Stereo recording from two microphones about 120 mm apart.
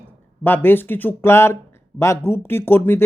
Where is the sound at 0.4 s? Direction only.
15° left (ahead or behind).